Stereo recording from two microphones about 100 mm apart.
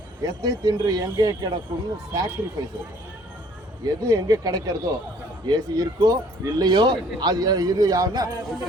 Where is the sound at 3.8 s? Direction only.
35° right (ahead or behind).